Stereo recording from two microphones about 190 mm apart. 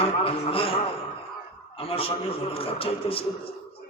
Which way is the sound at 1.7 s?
30° left (ahead or behind).